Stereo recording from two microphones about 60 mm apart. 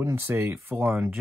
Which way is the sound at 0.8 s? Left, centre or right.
Right.